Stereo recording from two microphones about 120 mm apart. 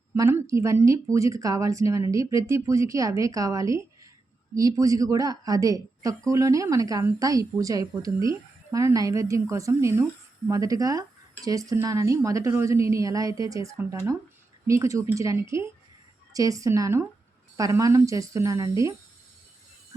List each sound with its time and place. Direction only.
0.1 s a woman's voice: 20° right (ahead or behind)